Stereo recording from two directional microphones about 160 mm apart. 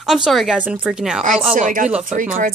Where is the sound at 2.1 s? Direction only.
55° right (ahead or behind).